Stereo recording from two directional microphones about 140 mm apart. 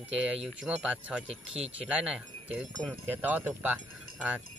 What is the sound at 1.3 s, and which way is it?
Speech, 50° right (ahead or behind).